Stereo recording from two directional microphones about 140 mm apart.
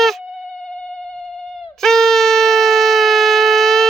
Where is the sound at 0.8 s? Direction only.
5° left (ahead or behind).